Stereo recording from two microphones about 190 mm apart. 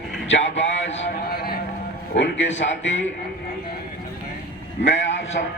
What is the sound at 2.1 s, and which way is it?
Speech, 70° left (ahead or behind).